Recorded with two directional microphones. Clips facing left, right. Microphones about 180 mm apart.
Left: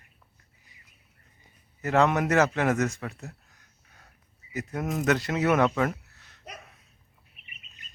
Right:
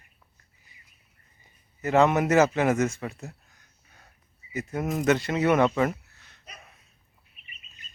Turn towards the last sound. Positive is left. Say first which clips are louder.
# even
turn(degrees=0)  # may be behind; listen again after turning